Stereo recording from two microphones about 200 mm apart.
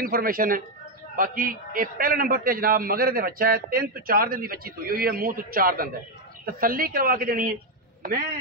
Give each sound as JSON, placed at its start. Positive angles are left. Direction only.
{"t": 0.0, "sound": "a man's voice", "side_deg": -45}